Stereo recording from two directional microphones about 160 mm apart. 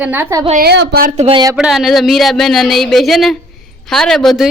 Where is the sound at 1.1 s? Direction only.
35° right (ahead or behind).